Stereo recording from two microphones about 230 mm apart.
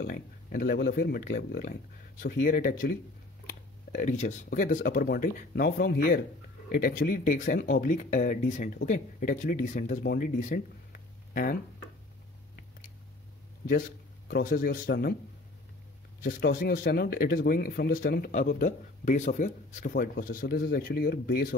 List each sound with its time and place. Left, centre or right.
0.0 s speech: left
13.7 s speech: left
16.2 s speech: left